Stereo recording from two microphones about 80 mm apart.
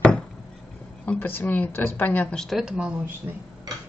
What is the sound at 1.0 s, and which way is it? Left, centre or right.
Speech, left.